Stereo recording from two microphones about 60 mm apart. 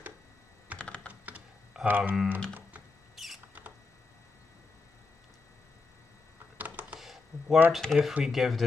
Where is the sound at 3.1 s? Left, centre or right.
Centre.